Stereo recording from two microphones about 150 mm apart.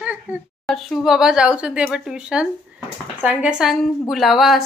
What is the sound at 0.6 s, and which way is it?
Speech, centre (ahead or behind).